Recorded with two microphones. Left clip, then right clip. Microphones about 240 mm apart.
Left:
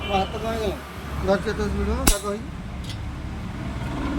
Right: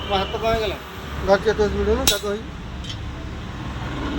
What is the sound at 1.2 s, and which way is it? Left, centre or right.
Speech, centre.